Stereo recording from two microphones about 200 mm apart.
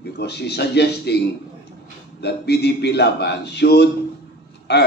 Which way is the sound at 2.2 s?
55° left (ahead or behind).